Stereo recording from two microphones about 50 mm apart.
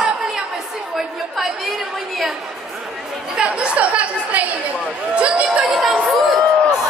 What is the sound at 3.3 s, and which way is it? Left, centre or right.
A man's voice, right.